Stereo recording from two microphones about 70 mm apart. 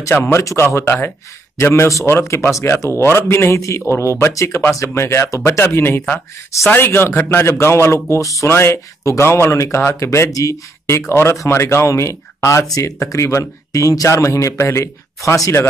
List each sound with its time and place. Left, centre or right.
0.1 s speech: left
0.8 s speech: left
1.6 s speech: left
2.0 s speech: left